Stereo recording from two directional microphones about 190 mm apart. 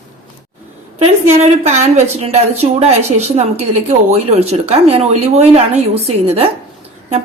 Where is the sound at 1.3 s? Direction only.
35° right (ahead or behind).